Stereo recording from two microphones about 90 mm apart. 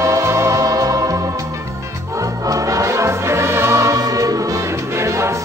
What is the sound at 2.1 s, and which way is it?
Music, 40° right (ahead or behind).